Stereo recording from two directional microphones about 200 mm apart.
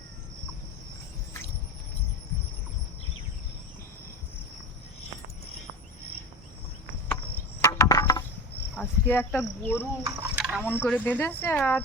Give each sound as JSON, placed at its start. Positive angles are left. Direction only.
{"t": 7.6, "sound": "insect", "side_deg": 15}
{"t": 8.7, "sound": "speech", "side_deg": 10}
{"t": 10.2, "sound": "speech", "side_deg": -5}
{"t": 10.6, "sound": "speech", "side_deg": 10}